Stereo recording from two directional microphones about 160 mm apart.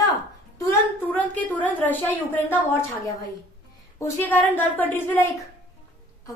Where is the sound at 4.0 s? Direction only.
10° left (ahead or behind).